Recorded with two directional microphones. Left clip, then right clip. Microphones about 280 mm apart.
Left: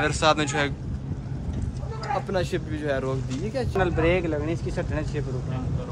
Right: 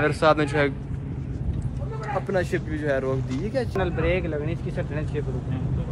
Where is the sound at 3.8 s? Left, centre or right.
Left.